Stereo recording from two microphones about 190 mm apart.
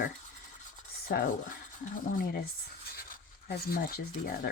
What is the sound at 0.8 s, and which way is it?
Speech, 50° left (ahead or behind).